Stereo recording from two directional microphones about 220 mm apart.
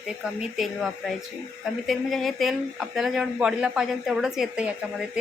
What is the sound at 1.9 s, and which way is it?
Speech, centre (ahead or behind).